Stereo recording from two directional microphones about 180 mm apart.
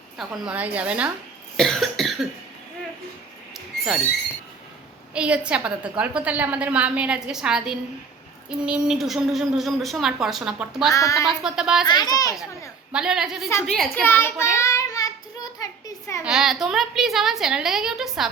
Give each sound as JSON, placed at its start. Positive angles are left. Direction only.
{"t": 0.2, "sound": "a woman's voice", "side_deg": -5}
{"t": 1.5, "sound": "cough", "side_deg": 0}
{"t": 5.1, "sound": "a woman's voice", "side_deg": -5}
{"t": 10.9, "sound": "a child's voice", "side_deg": 15}
{"t": 11.4, "sound": "speech", "side_deg": -5}
{"t": 11.9, "sound": "a child's voice", "side_deg": 20}
{"t": 12.9, "sound": "speech", "side_deg": -5}
{"t": 14.0, "sound": "a child's voice", "side_deg": 10}
{"t": 14.5, "sound": "child singing", "side_deg": 15}
{"t": 16.2, "sound": "speech", "side_deg": -5}